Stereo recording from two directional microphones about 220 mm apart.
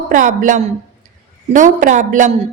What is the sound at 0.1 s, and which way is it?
A woman's voice, 35° right (ahead or behind).